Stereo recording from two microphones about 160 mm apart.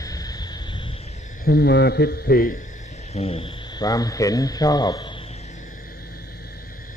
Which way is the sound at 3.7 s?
25° left (ahead or behind).